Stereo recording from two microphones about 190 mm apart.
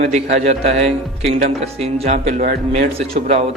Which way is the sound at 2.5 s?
50° right (ahead or behind).